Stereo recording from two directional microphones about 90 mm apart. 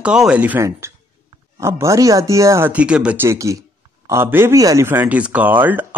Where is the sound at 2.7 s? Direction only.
15° right (ahead or behind).